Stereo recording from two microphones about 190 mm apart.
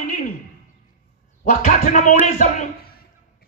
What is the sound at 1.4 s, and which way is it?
Speech, 40° left (ahead or behind).